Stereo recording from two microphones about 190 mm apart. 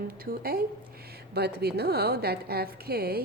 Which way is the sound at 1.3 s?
60° right (ahead or behind).